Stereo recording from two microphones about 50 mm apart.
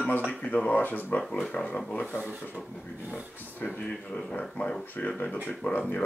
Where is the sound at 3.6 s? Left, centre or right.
Left.